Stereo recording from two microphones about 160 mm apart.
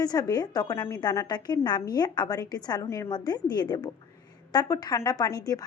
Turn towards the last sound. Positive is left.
turn(degrees=25)  # may be behind; listen again after turning